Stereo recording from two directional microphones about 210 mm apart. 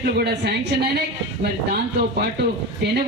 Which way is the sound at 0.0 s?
50° right (ahead or behind).